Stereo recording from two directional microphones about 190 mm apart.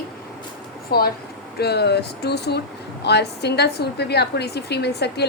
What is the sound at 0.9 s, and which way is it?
A woman's voice, 55° left (ahead or behind).